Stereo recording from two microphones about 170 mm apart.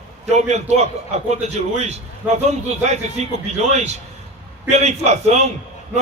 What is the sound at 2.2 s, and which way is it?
Speech, 10° right (ahead or behind).